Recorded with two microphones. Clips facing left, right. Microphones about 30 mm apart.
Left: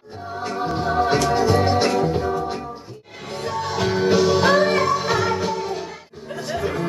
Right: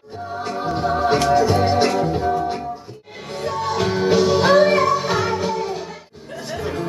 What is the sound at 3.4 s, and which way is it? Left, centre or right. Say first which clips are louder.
Music: right 2 dB; centre.